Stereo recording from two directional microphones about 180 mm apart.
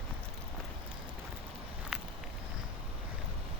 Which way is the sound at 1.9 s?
5° right (ahead or behind).